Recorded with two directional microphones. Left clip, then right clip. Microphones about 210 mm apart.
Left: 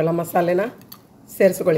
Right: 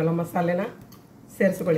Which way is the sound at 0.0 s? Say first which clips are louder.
Left 6 dB; 50° left (ahead or behind).